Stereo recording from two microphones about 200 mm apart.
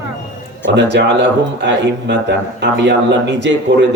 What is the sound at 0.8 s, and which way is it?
Speech, 60° right (ahead or behind).